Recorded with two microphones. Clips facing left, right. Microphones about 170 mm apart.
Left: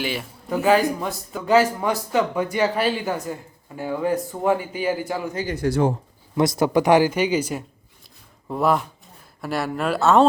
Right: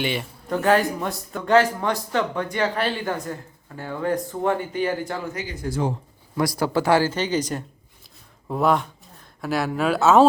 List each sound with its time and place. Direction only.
0.0 s a man's voice: centre (ahead or behind)
5.5 s speech: 70° left (ahead or behind)
6.3 s a man's voice: 20° left (ahead or behind); by 10.2 s centre (ahead or behind)